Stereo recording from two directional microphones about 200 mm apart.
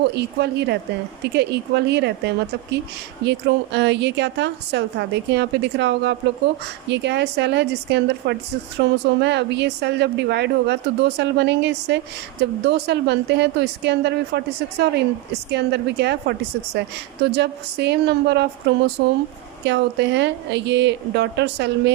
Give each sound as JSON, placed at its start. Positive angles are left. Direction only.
{"t": 0.0, "sound": "a woman's voice", "side_deg": -55}
{"t": 17.3, "sound": "a woman's voice", "side_deg": -55}